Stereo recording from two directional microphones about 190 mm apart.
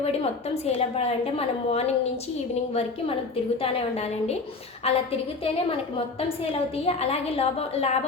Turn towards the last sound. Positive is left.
turn(degrees=35)  # may be behind; listen again after turning